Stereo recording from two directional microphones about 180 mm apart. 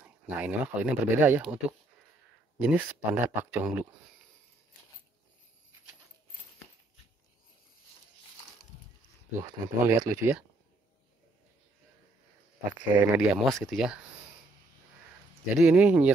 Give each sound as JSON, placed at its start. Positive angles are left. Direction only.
{"t": 0.0, "sound": "speech", "side_deg": -10}
{"t": 3.0, "sound": "speech", "side_deg": -10}
{"t": 9.4, "sound": "speech", "side_deg": -20}
{"t": 12.7, "sound": "speech", "side_deg": -10}
{"t": 13.3, "sound": "speech", "side_deg": 0}
{"t": 15.5, "sound": "speech", "side_deg": -5}